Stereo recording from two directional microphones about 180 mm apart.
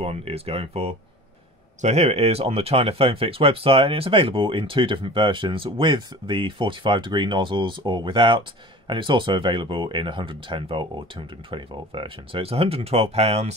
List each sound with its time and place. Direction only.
0.0 s speech: 35° right (ahead or behind)